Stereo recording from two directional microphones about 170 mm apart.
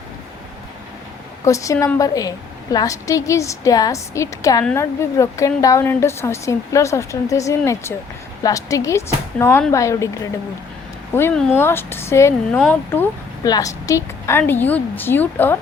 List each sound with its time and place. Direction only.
1.5 s a woman's voice: 20° left (ahead or behind)
13.4 s speech: 20° left (ahead or behind)